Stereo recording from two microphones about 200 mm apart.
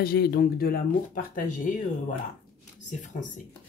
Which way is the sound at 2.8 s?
35° left (ahead or behind).